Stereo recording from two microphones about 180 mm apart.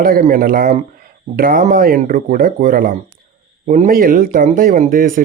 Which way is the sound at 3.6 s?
40° right (ahead or behind).